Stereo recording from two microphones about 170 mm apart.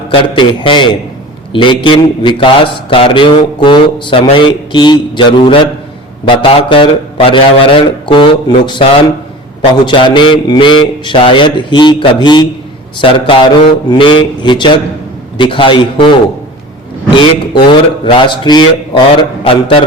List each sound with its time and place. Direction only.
0.1 s a man's voice: 30° left (ahead or behind)
17.2 s a man's voice: 30° left (ahead or behind)